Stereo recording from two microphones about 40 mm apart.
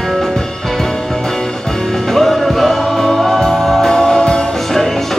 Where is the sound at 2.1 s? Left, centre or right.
Centre.